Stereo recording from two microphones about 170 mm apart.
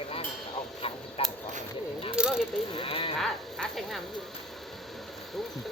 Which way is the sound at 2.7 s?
30° left (ahead or behind).